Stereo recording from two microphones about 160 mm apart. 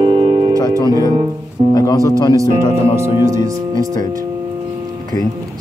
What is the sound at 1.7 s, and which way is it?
Music, 25° left (ahead or behind).